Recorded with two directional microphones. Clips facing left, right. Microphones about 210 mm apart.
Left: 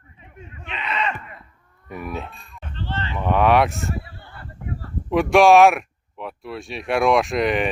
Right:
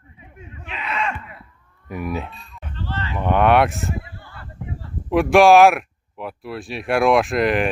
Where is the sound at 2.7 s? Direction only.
30° left (ahead or behind).